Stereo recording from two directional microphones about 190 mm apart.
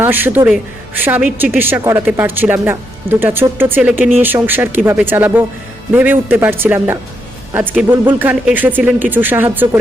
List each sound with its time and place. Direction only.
0.0 s speech: 10° right (ahead or behind)